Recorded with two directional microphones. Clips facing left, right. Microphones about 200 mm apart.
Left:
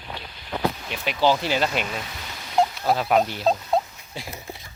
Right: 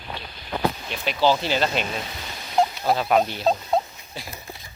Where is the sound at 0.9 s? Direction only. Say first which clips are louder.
Even; 10° left (ahead or behind).